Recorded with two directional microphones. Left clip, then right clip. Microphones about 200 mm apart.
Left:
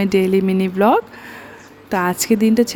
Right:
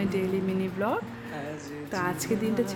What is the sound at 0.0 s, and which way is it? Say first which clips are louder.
Speech: left 13 dB; 50° left (ahead or behind).